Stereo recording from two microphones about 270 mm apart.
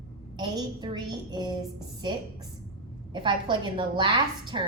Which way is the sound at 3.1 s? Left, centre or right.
Centre.